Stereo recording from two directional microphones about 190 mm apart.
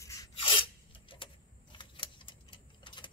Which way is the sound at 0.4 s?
25° left (ahead or behind).